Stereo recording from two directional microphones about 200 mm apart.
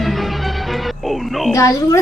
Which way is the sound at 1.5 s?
15° left (ahead or behind).